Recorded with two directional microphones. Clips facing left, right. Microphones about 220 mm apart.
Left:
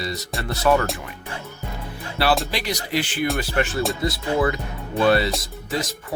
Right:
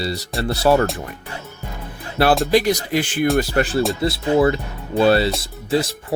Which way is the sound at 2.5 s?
50° right (ahead or behind).